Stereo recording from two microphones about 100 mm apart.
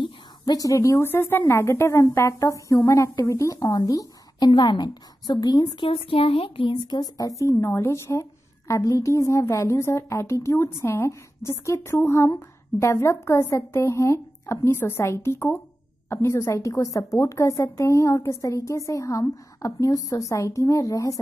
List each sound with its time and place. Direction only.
0.5 s a woman's voice: 35° left (ahead or behind)
4.5 s a woman's voice: 50° left (ahead or behind)
5.9 s a woman's voice: 70° left (ahead or behind); by 21.2 s 35° left (ahead or behind)